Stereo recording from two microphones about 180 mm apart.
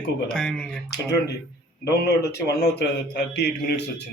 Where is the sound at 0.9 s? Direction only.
65° left (ahead or behind).